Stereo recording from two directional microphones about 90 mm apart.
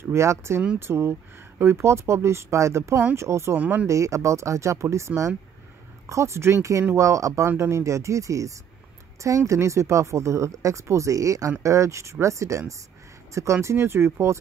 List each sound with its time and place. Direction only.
0.0 s speech: 30° right (ahead or behind)
3.5 s speech: 15° right (ahead or behind)
3.8 s speech: 35° right (ahead or behind)